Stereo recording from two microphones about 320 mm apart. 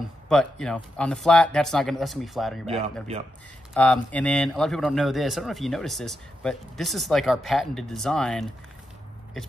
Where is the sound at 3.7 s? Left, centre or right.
Centre.